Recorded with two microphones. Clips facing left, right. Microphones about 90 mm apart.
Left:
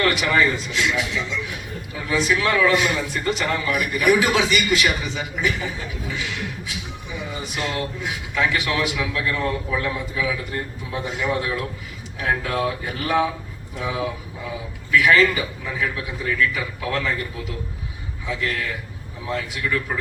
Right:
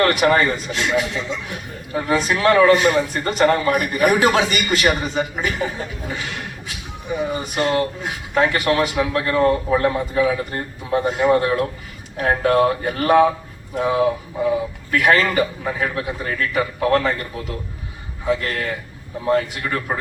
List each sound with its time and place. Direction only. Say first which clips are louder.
0.0 s a man's voice: right 4 dB; 45° right (ahead or behind)